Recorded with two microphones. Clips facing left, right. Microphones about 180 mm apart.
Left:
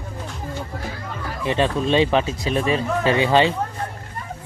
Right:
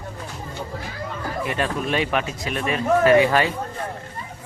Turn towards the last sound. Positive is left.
turn(degrees=25)  # may be behind; listen again after turning